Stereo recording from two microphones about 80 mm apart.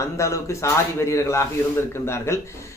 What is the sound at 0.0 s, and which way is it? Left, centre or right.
Speech, left.